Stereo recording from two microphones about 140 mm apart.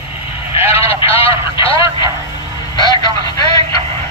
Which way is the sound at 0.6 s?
45° left (ahead or behind).